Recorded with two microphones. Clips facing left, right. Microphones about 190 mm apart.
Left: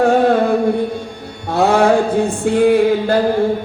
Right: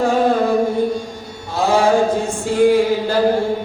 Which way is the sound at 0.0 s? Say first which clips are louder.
Left 3 dB; 65° left (ahead or behind).